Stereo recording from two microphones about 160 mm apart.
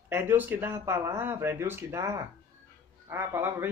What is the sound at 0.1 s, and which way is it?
Speech, 10° right (ahead or behind).